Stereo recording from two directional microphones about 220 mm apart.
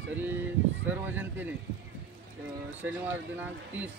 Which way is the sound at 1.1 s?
10° right (ahead or behind).